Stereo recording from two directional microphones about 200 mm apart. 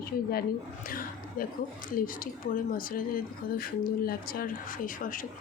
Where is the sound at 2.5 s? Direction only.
45° left (ahead or behind).